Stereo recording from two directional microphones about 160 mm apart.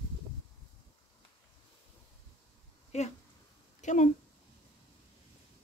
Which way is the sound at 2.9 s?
45° left (ahead or behind).